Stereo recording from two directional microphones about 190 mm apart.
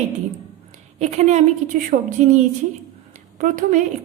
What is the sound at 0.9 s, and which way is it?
A woman's voice, 35° right (ahead or behind).